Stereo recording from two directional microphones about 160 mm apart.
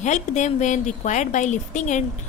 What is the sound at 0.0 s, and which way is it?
A woman's voice, 50° left (ahead or behind).